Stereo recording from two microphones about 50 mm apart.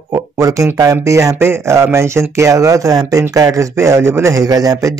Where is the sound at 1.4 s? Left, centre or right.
Right.